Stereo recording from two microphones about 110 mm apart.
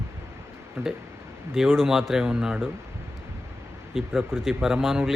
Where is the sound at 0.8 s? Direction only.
25° right (ahead or behind).